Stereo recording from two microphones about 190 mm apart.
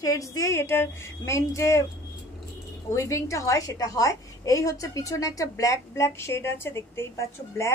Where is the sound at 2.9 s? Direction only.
15° left (ahead or behind).